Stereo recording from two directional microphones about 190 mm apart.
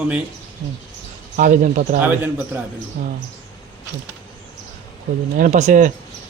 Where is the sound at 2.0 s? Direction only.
10° right (ahead or behind).